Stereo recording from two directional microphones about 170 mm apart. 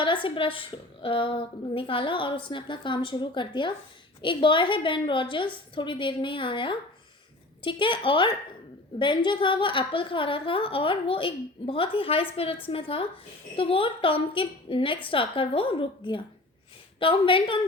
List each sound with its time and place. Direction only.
0.0 s a woman's voice: 30° left (ahead or behind)